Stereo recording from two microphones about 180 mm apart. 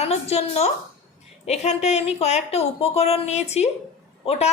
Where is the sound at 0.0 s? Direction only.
35° left (ahead or behind).